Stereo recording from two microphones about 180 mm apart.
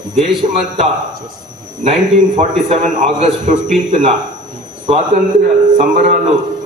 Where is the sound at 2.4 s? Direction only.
40° right (ahead or behind).